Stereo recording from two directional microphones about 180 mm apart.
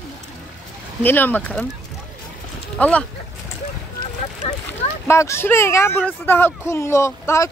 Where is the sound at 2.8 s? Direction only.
5° left (ahead or behind).